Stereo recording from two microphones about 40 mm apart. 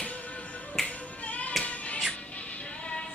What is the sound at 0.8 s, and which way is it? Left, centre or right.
Music, left.